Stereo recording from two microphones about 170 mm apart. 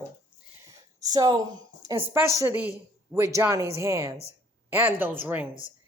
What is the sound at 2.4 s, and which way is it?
Speech, 10° right (ahead or behind).